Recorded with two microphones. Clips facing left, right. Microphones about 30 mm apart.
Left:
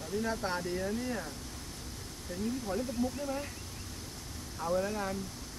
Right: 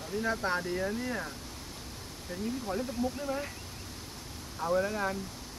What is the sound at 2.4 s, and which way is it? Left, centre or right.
Speech, centre.